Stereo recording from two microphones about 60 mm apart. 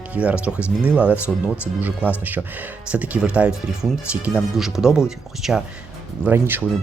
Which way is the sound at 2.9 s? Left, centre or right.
Right.